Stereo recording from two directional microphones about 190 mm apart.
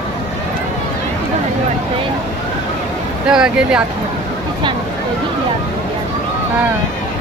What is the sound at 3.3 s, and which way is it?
Speech, 5° right (ahead or behind).